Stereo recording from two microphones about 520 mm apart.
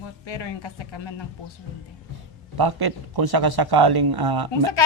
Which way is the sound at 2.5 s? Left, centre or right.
Right.